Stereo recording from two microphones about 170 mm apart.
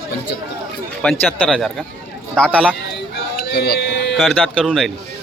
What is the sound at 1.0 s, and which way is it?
Speech, 5° left (ahead or behind).